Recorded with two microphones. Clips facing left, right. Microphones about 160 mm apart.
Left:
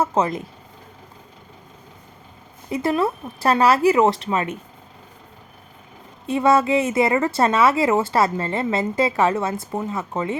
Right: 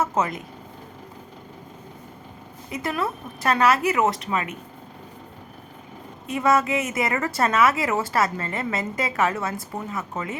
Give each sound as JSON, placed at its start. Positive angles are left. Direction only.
{"t": 0.0, "sound": "speech", "side_deg": 30}
{"t": 2.6, "sound": "speech", "side_deg": 30}
{"t": 6.2, "sound": "a woman's voice", "side_deg": 30}